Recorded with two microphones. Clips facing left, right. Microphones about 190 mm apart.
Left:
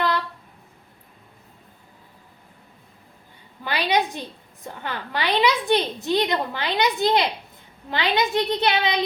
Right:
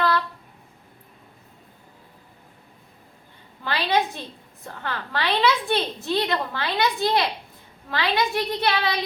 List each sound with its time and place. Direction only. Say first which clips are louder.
3.6 s a woman's voice: left 1 dB; 15° left (ahead or behind)